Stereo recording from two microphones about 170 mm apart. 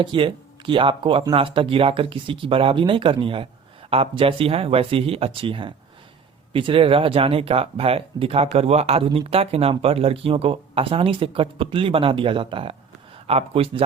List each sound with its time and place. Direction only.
0.0 s speech: 30° right (ahead or behind)